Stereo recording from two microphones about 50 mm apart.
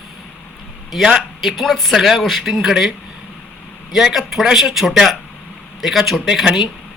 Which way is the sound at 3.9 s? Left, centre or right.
Centre.